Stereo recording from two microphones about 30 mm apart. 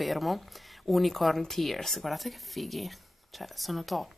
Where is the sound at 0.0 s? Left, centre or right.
Centre.